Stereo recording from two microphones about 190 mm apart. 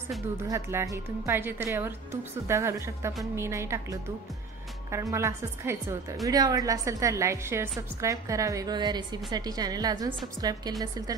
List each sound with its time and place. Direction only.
0.5 s a woman's voice: 15° right (ahead or behind)
5.1 s a woman's voice: 15° right (ahead or behind)